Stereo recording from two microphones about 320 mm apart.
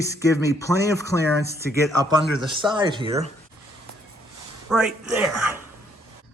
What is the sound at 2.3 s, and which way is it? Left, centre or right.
Speech, centre.